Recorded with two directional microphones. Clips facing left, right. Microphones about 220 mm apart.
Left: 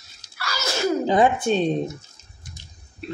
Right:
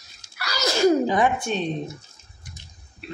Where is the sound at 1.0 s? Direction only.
25° left (ahead or behind).